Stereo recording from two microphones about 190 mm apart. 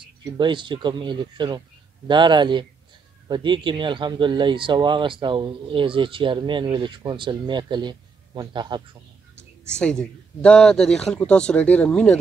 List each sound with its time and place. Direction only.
0.0 s speech: 25° right (ahead or behind)
9.8 s a man's voice: 5° left (ahead or behind)